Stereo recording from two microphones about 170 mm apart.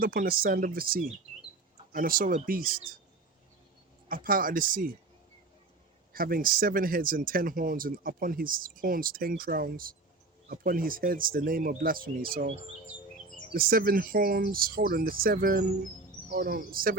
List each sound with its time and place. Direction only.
0.0 s speech: 60° right (ahead or behind)
4.1 s speech: 55° right (ahead or behind)
6.1 s speech: 60° right (ahead or behind)
13.5 s speech: 60° right (ahead or behind)